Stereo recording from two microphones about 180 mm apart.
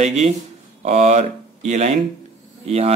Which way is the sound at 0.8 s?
40° right (ahead or behind).